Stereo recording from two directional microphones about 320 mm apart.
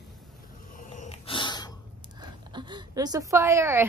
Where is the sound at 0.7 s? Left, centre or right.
Left.